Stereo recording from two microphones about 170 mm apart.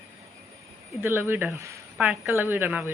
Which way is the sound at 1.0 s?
15° right (ahead or behind).